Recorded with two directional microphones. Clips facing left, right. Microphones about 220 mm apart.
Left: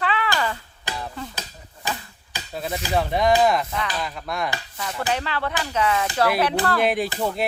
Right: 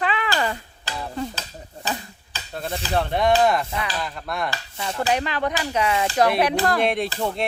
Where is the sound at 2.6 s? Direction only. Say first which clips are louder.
Left 1 dB; 5° left (ahead or behind).